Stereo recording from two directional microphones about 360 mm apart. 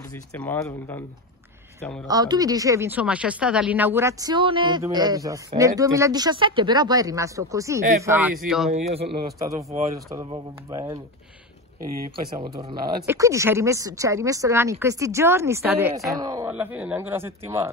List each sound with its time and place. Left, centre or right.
0.3 s speech: centre
2.0 s speech: centre
8.7 s speech: centre
12.4 s speech: centre